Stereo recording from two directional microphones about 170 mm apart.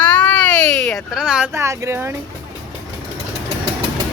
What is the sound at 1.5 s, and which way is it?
Speech, 15° right (ahead or behind).